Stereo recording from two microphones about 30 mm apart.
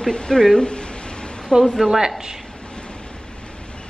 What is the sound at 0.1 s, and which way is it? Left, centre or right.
Speech, left.